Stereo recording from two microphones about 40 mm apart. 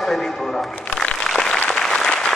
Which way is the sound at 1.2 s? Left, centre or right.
Centre.